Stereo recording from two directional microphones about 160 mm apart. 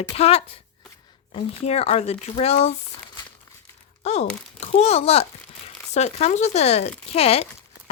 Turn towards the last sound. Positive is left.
turn(degrees=40)  # may be behind; listen again after turning